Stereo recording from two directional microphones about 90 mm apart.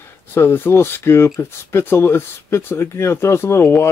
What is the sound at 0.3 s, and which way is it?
Speech, 25° left (ahead or behind).